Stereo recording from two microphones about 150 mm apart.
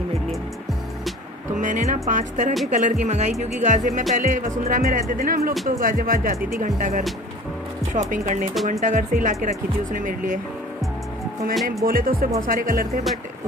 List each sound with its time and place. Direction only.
1.6 s speech: 60° right (ahead or behind)
11.8 s speech: 75° right (ahead or behind)